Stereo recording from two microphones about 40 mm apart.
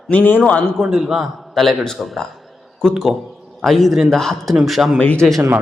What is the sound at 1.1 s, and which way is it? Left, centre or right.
Speech, centre.